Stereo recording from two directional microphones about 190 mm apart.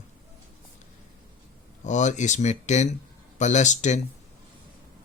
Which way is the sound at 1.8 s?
40° left (ahead or behind).